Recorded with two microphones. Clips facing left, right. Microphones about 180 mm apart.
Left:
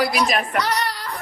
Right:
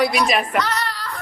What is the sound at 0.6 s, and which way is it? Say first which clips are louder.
Music: even; 15° left (ahead or behind).